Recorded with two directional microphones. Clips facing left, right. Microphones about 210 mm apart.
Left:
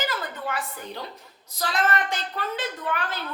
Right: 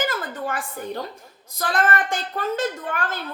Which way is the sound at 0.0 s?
50° right (ahead or behind).